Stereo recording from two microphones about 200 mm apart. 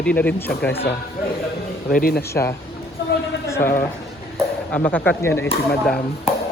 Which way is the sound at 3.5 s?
15° left (ahead or behind).